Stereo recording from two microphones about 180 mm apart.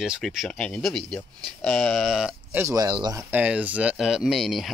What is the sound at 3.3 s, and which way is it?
Speech, 10° right (ahead or behind).